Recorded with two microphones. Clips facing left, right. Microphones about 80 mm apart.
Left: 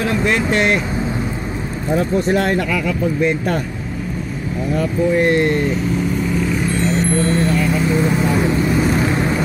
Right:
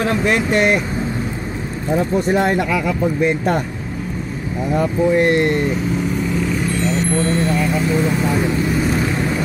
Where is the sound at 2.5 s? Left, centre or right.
Centre.